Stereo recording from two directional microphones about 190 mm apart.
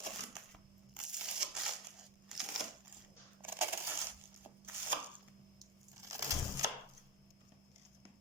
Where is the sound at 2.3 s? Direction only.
5° right (ahead or behind).